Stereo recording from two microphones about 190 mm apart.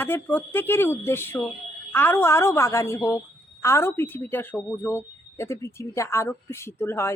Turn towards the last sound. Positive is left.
turn(degrees=15)  # may be behind; listen again after turning